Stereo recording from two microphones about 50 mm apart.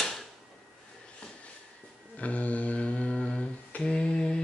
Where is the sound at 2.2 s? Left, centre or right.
Left.